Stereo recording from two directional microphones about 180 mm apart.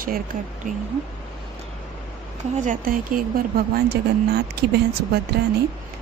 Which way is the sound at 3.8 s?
65° right (ahead or behind).